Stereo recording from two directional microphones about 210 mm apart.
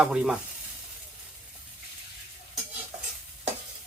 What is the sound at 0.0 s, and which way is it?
Speech, 5° right (ahead or behind).